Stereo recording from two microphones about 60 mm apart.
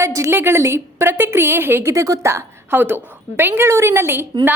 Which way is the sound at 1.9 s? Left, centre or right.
Right.